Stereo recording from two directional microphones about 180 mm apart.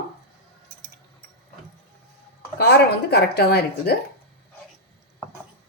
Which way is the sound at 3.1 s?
65° left (ahead or behind).